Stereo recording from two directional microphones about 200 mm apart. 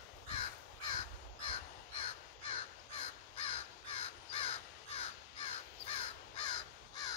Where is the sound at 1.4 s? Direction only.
25° left (ahead or behind).